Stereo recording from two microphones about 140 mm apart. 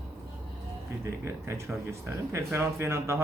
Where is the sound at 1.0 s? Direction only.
20° right (ahead or behind).